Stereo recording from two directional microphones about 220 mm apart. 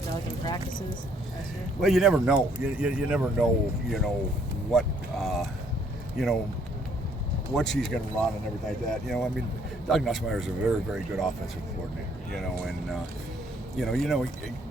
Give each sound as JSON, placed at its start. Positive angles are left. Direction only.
{"t": 0.4, "sound": "speech", "side_deg": 20}
{"t": 1.8, "sound": "speech", "side_deg": 0}
{"t": 7.5, "sound": "speech", "side_deg": 0}
{"t": 12.3, "sound": "speech", "side_deg": 0}